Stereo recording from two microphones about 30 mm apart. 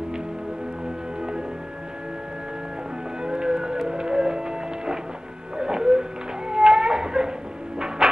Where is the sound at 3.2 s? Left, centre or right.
Right.